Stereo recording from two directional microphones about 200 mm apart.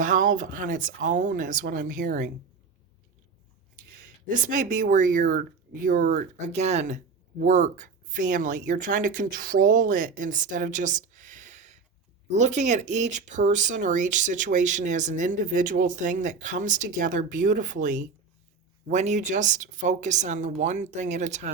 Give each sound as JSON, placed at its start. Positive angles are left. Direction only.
{"t": 0.0, "sound": "speech", "side_deg": -40}
{"t": 4.3, "sound": "speech", "side_deg": -40}